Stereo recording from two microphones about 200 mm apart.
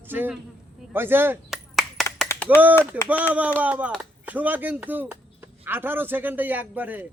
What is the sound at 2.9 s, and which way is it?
Speech, 10° right (ahead or behind).